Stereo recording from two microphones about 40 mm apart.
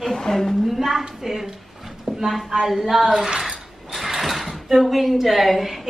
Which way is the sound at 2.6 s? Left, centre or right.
Centre.